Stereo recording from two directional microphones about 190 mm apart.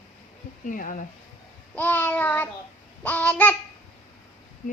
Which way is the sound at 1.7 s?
10° left (ahead or behind).